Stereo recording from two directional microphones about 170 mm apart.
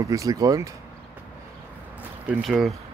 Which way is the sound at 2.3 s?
Centre (ahead or behind).